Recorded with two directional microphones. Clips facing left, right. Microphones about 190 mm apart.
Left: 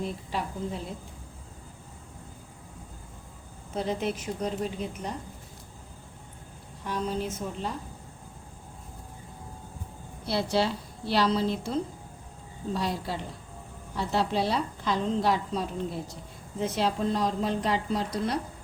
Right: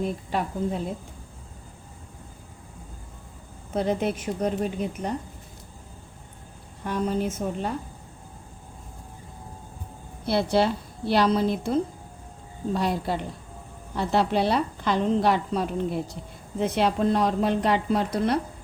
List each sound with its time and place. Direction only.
0.3 s a woman's voice: 55° right (ahead or behind)
3.8 s a woman's voice: 60° right (ahead or behind)
6.8 s a woman's voice: 55° right (ahead or behind)
10.2 s a woman's voice: 55° right (ahead or behind)